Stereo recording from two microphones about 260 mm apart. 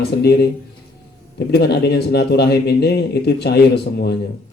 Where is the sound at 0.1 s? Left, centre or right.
Left.